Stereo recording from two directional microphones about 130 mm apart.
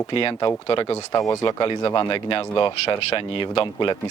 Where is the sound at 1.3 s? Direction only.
25° left (ahead or behind).